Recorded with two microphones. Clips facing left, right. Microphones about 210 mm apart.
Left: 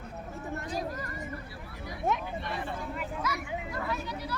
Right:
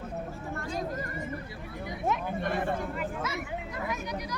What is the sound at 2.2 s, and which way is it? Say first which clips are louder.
Speech: right 6 dB; 50° right (ahead or behind).